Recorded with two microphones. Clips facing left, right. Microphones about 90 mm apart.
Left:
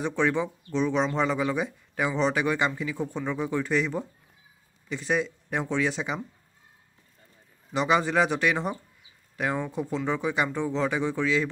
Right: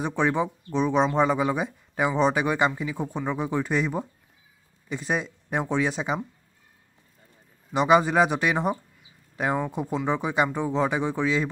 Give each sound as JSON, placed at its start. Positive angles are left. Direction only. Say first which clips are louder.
{"t": 0.0, "sound": "speech", "louder": "right 1 dB", "side_deg": -15}
{"t": 7.7, "sound": "speech", "louder": "right 4 dB", "side_deg": -20}